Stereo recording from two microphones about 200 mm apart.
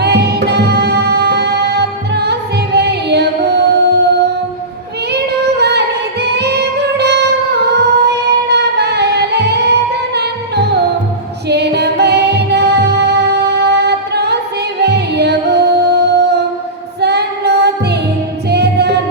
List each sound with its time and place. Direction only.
0.0 s music: 55° right (ahead or behind)
5.1 s music: 55° right (ahead or behind)
17.0 s female singing: 55° right (ahead or behind)
18.4 s music: 55° right (ahead or behind)